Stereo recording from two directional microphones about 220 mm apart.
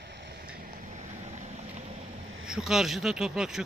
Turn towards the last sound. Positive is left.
turn(degrees=0)  # may be behind; listen again after turning